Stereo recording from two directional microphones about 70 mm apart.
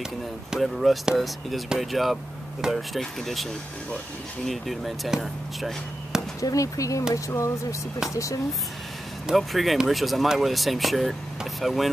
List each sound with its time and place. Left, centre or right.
0.5 s speech: centre
4.5 s speech: centre
6.4 s speech: left
9.3 s speech: centre